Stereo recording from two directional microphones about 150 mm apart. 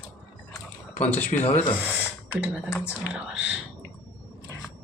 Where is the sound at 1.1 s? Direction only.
10° left (ahead or behind).